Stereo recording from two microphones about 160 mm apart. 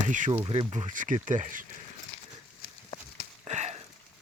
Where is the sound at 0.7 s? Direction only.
55° right (ahead or behind).